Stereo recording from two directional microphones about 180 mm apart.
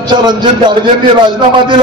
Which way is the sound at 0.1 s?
25° right (ahead or behind).